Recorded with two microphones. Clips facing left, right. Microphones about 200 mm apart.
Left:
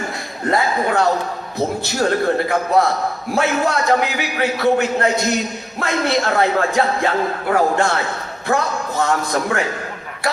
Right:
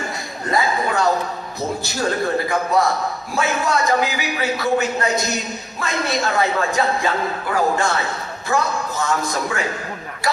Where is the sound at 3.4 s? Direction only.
60° left (ahead or behind).